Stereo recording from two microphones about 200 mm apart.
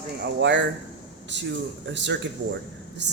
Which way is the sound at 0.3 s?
60° right (ahead or behind).